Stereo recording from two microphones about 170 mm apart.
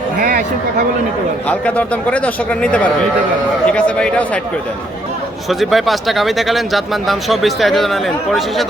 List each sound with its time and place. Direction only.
0.2 s speech: 55° right (ahead or behind)
1.5 s speech: 10° left (ahead or behind)
5.5 s speech: centre (ahead or behind)